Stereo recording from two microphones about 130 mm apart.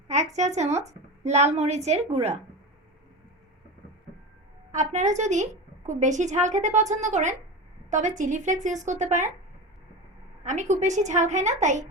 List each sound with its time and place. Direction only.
0.3 s a woman's voice: 60° right (ahead or behind)
4.7 s a woman's voice: 65° right (ahead or behind)
10.4 s a woman's voice: 65° right (ahead or behind)